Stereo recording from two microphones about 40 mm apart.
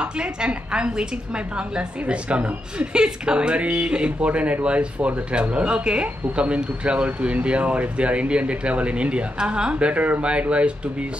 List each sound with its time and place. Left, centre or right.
0.0 s a woman's voice: right